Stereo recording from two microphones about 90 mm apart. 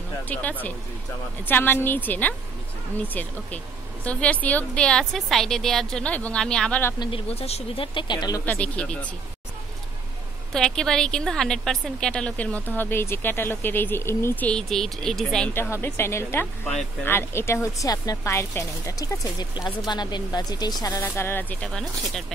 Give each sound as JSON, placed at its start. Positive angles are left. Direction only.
{"t": 0.3, "sound": "speech", "side_deg": 20}
{"t": 4.0, "sound": "a woman's voice", "side_deg": 15}
{"t": 7.0, "sound": "speech", "side_deg": 85}
{"t": 8.5, "sound": "a woman's voice", "side_deg": 15}
{"t": 10.5, "sound": "a woman's voice", "side_deg": 5}
{"t": 12.6, "sound": "speech", "side_deg": 25}
{"t": 14.4, "sound": "speech", "side_deg": 10}
{"t": 15.5, "sound": "speech", "side_deg": 25}
{"t": 17.8, "sound": "speech", "side_deg": 45}
{"t": 18.2, "sound": "a woman's voice", "side_deg": 30}
{"t": 19.9, "sound": "speech", "side_deg": 55}
{"t": 21.0, "sound": "speech", "side_deg": 25}
{"t": 21.6, "sound": "speech", "side_deg": 5}